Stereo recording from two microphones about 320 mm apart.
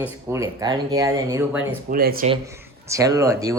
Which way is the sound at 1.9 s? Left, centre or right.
Right.